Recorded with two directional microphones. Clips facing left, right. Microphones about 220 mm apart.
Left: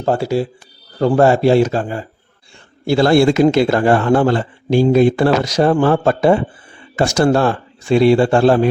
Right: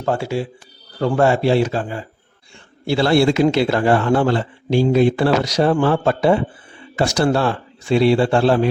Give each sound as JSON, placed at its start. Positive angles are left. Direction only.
{"t": 0.0, "sound": "a man's voice", "side_deg": 35}